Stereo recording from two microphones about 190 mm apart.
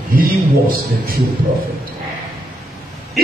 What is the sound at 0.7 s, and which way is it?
Speech, 50° right (ahead or behind).